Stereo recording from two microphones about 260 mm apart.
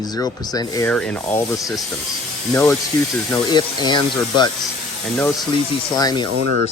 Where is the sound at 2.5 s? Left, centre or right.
Centre.